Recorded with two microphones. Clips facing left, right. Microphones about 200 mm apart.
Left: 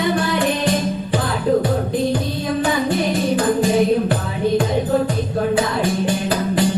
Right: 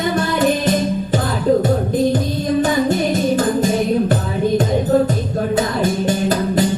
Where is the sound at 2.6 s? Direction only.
40° right (ahead or behind).